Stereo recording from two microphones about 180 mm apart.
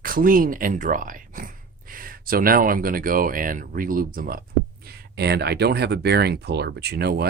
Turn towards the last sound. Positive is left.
turn(degrees=-60)  # may be behind; listen again after turning